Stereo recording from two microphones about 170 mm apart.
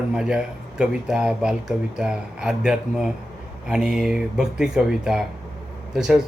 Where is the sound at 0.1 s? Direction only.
5° right (ahead or behind).